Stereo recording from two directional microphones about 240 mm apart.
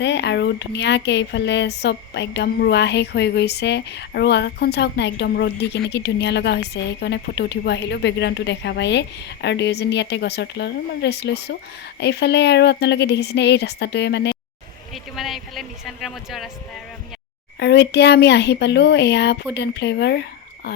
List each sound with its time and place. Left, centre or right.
0.0 s speech: left
15.1 s speech: centre
17.6 s speech: left